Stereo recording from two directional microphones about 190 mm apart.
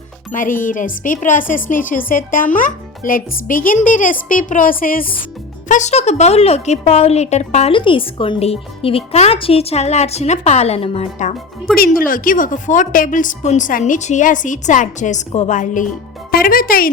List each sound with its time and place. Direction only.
0.3 s a woman's voice: 45° left (ahead or behind)